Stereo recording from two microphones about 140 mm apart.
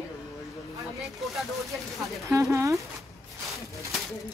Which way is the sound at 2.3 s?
20° right (ahead or behind).